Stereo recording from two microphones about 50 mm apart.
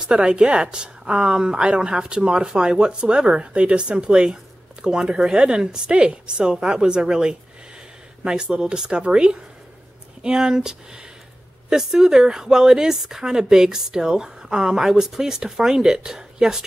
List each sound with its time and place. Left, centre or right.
0.0 s speech: centre